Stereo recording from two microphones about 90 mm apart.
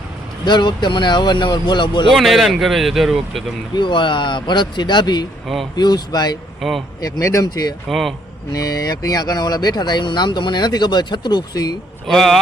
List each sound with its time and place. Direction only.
0.4 s speech: 55° left (ahead or behind)
2.1 s speech: centre (ahead or behind)
3.8 s speech: 60° left (ahead or behind)
6.6 s speech: centre (ahead or behind)
7.0 s speech: 35° left (ahead or behind)
7.4 s speech: 45° left (ahead or behind)
7.9 s speech: centre (ahead or behind)
8.5 s speech: 40° left (ahead or behind)
12.0 s speech: centre (ahead or behind)